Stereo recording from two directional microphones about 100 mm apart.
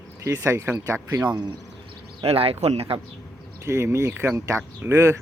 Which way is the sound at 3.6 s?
25° right (ahead or behind).